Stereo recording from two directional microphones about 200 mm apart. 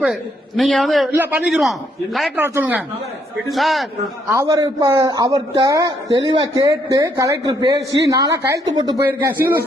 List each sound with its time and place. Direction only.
0.0 s a man's voice: centre (ahead or behind)
4.3 s a man's voice: 15° right (ahead or behind)